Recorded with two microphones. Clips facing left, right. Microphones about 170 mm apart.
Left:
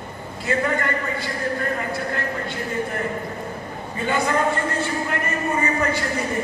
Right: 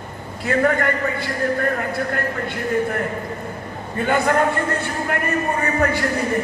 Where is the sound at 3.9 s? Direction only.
55° right (ahead or behind).